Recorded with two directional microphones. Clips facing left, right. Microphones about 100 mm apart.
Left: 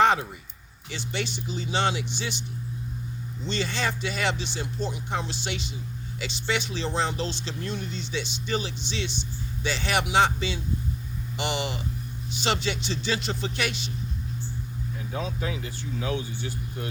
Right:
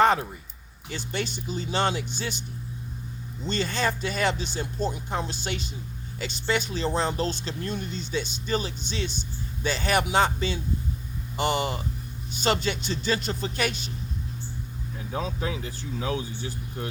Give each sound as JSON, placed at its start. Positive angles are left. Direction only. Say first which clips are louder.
{"t": 0.0, "sound": "a sound", "louder": "even", "side_deg": -40}
{"t": 0.9, "sound": "speech", "louder": "right 1 dB", "side_deg": -45}
{"t": 3.4, "sound": "speech", "louder": "right 2 dB", "side_deg": -45}
{"t": 15.1, "sound": "speech", "louder": "right 2 dB", "side_deg": -40}